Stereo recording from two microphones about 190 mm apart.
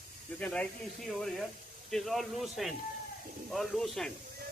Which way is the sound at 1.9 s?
Centre (ahead or behind).